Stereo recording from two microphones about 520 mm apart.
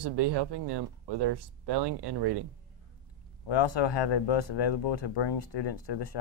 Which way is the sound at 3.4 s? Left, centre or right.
Left.